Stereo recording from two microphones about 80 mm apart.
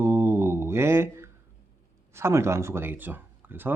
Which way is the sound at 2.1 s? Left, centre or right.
Right.